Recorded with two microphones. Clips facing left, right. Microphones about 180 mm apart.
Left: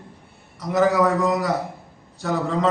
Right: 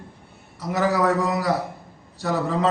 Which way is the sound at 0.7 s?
Centre (ahead or behind).